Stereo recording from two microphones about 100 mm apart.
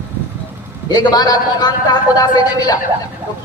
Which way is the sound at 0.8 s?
40° left (ahead or behind).